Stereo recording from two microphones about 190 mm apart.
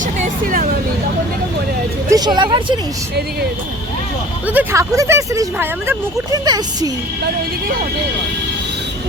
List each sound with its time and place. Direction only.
0.0 s a sound: 45° right (ahead or behind)
2.0 s speech: 20° right (ahead or behind)
4.4 s speech: 10° right (ahead or behind)